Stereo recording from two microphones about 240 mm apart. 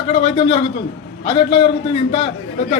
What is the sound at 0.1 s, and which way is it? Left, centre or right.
A man's voice, left.